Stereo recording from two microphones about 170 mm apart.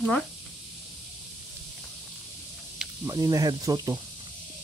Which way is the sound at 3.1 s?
20° right (ahead or behind).